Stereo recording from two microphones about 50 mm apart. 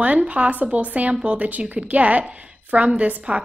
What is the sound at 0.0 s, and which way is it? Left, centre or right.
A woman's voice, right.